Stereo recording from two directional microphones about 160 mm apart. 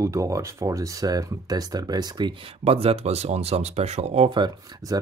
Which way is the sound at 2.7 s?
40° right (ahead or behind).